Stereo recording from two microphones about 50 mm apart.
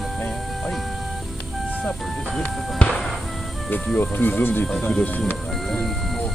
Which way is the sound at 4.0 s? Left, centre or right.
Left.